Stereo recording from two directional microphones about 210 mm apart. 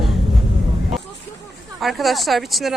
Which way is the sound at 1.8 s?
Centre (ahead or behind).